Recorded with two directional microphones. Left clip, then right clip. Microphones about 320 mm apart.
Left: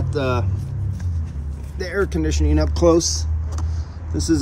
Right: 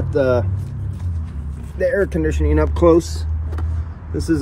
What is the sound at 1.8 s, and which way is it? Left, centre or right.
Speech, centre.